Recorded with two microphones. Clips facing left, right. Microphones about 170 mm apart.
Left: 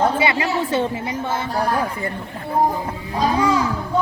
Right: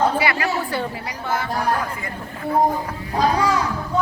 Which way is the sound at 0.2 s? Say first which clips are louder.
Left 2 dB; 20° left (ahead or behind).